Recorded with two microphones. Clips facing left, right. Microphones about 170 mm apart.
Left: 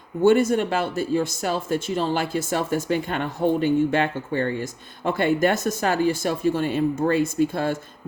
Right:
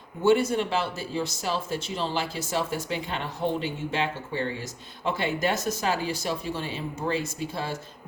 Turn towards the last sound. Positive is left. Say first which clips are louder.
# left 10 dB
turn(degrees=55)  # may be behind; listen again after turning